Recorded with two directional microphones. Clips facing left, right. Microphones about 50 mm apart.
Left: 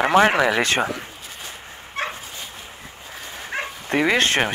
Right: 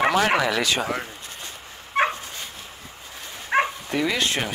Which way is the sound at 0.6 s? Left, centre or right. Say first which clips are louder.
Left 3 dB; left.